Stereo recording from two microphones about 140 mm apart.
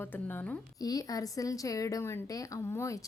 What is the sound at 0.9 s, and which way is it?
Speech, 25° left (ahead or behind).